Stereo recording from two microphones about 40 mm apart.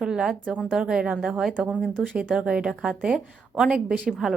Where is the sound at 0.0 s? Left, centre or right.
Centre.